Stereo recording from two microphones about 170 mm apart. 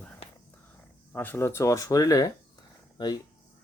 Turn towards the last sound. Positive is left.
turn(degrees=25)  # may be behind; listen again after turning